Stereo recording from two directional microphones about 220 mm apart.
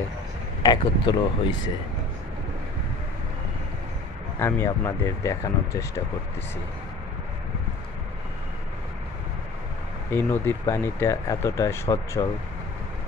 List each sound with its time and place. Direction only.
0.6 s speech: 20° left (ahead or behind)
4.4 s speech: 10° left (ahead or behind)
10.1 s speech: 10° left (ahead or behind)